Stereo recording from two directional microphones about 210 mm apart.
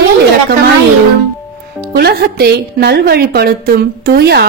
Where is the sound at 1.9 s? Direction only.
45° right (ahead or behind).